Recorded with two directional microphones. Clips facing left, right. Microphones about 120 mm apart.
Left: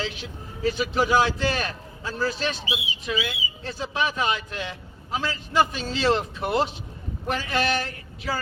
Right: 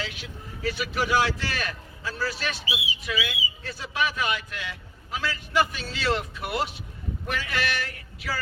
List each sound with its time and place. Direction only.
0.0 s a man's voice: 25° left (ahead or behind)